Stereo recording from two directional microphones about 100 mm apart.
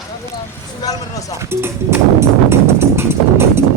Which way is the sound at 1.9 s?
25° right (ahead or behind).